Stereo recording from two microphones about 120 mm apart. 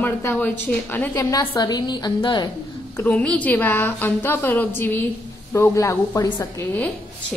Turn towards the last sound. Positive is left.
turn(degrees=30)  # may be behind; listen again after turning